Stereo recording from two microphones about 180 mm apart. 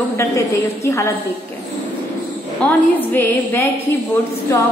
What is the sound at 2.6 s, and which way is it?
A woman's voice, 10° left (ahead or behind).